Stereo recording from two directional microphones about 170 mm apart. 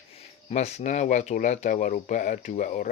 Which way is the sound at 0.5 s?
40° left (ahead or behind).